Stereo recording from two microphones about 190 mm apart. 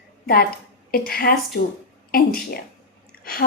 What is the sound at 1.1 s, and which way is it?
Speech, 50° left (ahead or behind).